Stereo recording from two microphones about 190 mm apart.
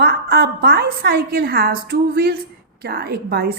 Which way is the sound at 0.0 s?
55° right (ahead or behind).